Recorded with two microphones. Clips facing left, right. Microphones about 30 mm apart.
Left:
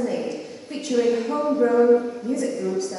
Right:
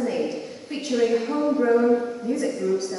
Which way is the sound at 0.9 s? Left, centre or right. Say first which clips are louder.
Left 1 dB; centre.